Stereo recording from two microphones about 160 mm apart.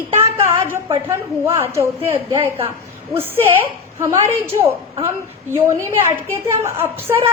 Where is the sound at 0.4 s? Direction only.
15° right (ahead or behind).